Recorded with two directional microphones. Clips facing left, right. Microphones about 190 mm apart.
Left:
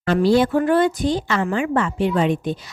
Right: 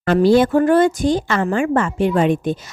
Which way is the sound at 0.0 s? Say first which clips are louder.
Right 3 dB; 50° right (ahead or behind).